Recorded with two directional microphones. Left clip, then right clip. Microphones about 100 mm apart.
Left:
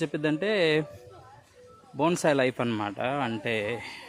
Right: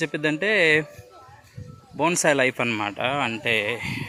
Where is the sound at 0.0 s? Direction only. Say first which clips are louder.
Right 4 dB; 20° left (ahead or behind).